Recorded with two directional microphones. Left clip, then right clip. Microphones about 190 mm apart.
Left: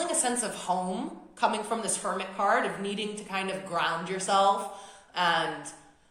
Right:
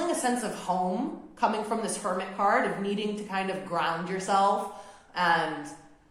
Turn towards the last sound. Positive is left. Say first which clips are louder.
# right 1 dB
turn(degrees=35)  # may be behind; listen again after turning